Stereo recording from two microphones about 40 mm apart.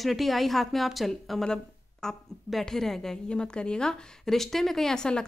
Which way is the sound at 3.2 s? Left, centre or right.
Left.